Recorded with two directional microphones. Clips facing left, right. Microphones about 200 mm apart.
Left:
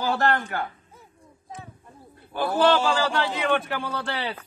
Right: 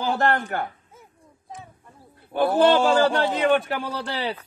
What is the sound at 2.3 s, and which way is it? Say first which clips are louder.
A man's voice: right 3 dB; 55° right (ahead or behind).